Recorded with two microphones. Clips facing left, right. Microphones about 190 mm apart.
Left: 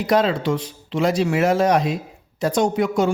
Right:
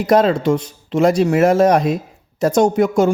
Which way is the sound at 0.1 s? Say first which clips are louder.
Right 5 dB; 45° right (ahead or behind).